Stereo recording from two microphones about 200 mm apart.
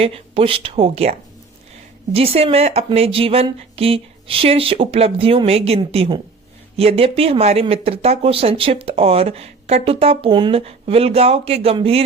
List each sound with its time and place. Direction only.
0.0 s speech: 30° right (ahead or behind)